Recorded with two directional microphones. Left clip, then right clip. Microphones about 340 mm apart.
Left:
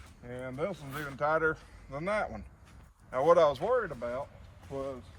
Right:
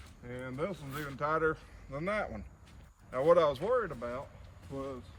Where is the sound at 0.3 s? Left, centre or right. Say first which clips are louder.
Left 2 dB; centre.